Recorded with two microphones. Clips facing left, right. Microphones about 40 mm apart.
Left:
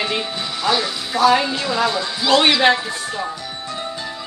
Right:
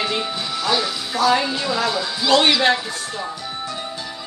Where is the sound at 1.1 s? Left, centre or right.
Left.